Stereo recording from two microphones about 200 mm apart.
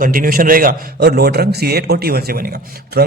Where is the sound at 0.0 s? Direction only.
45° right (ahead or behind).